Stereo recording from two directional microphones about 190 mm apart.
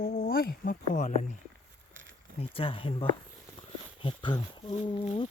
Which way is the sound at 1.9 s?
80° right.